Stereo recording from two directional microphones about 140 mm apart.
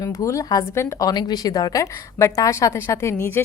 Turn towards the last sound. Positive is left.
turn(degrees=20)  # may be behind; listen again after turning